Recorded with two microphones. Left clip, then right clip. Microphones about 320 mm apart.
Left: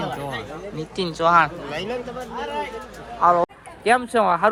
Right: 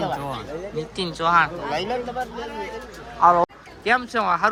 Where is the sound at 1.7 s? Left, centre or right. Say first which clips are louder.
Right 3 dB; right.